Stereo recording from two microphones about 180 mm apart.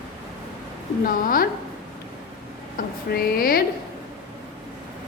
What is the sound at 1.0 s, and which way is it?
Speech, 50° left (ahead or behind).